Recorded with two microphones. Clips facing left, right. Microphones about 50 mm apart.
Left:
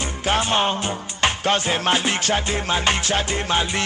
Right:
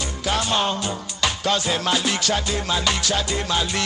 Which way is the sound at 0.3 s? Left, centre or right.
Left.